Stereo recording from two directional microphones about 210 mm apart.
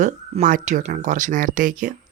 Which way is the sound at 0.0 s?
35° right (ahead or behind).